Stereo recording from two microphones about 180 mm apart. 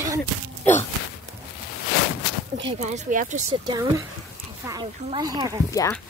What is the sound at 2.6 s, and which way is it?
Speech, 35° right (ahead or behind).